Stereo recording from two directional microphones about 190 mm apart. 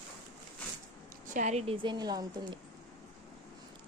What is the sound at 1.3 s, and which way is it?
A woman's voice, 35° right (ahead or behind).